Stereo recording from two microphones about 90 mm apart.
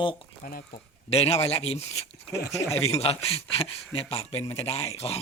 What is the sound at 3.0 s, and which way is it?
Speech, 90° left.